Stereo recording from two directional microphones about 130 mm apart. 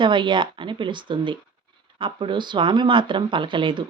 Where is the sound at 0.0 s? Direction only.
40° right (ahead or behind).